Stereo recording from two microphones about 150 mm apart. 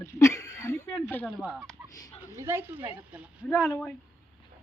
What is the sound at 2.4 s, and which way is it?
Speech, 15° right (ahead or behind).